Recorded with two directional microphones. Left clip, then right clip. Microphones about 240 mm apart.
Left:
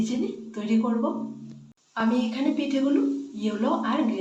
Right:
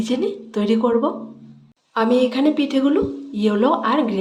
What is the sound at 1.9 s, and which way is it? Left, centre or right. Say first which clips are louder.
Speech: right 10 dB; right.